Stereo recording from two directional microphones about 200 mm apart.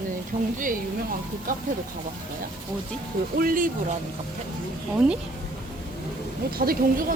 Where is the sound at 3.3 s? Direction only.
45° right (ahead or behind).